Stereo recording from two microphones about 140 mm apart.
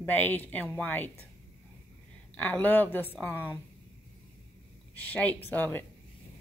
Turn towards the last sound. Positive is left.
turn(degrees=15)  # may be behind; listen again after turning